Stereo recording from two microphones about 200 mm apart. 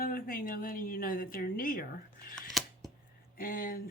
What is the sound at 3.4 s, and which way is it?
Speech, 45° left (ahead or behind).